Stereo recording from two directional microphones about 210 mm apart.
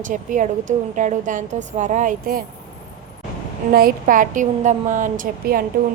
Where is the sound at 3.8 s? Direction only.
40° right (ahead or behind).